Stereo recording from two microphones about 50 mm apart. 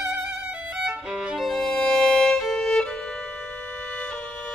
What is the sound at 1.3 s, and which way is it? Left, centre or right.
Violin, centre.